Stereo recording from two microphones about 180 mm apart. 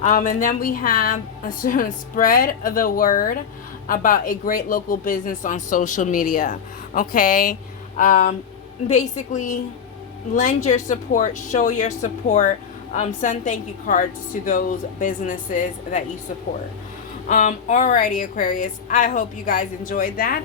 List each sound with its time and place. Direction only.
0.0 s a woman's voice: 40° left (ahead or behind)
17.2 s a woman's voice: 45° left (ahead or behind)